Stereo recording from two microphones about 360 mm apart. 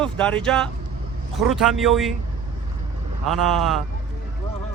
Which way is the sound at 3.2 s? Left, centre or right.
Centre.